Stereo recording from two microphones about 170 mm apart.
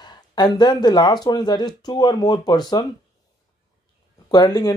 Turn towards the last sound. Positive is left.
turn(degrees=25)  # may be behind; listen again after turning